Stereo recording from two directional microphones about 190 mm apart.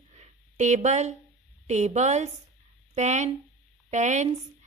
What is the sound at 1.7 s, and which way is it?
A woman's voice, 40° right (ahead or behind).